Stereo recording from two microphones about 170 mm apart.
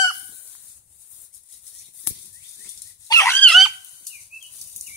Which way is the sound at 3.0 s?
15° left (ahead or behind).